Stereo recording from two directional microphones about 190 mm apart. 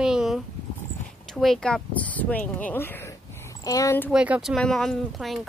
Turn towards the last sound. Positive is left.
turn(degrees=0)  # may be behind; listen again after turning